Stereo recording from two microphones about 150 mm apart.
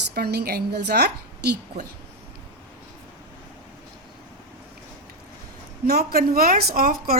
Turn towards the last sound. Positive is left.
turn(degrees=-70)  # may be behind; listen again after turning